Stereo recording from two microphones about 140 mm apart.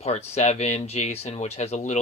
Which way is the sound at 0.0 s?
50° left (ahead or behind).